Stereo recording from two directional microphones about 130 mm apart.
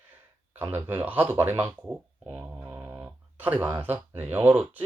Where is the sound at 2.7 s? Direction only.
15° right (ahead or behind).